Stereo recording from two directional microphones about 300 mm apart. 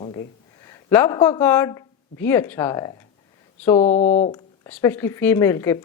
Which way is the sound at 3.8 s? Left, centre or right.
Left.